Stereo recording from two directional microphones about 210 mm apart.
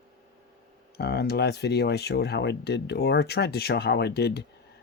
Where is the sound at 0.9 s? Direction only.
50° left (ahead or behind).